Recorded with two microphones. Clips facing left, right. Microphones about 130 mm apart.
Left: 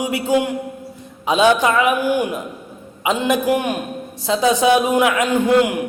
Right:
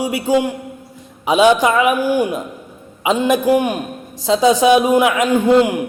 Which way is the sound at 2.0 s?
15° left (ahead or behind).